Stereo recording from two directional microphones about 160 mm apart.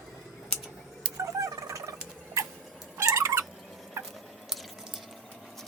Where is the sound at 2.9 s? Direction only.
20° right (ahead or behind).